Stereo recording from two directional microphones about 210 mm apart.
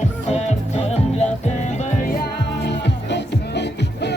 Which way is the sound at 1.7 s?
35° left (ahead or behind).